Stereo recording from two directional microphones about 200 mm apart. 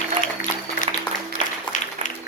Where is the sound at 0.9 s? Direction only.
30° right (ahead or behind).